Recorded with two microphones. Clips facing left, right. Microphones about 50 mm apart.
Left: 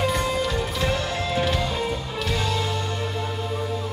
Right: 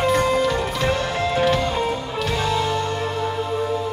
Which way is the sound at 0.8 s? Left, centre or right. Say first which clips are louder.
Right 5 dB; right.